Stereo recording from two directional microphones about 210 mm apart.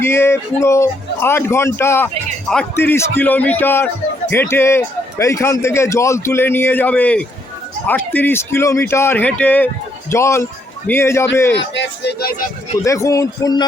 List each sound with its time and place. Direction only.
0.0 s a man's voice: 10° left (ahead or behind)
11.5 s speech: 55° left (ahead or behind)
12.8 s a man's voice: 15° left (ahead or behind)